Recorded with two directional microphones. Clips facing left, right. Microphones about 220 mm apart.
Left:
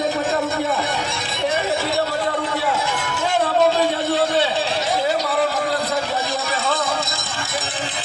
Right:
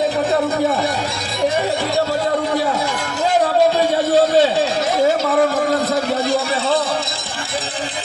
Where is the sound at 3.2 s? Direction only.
40° right (ahead or behind).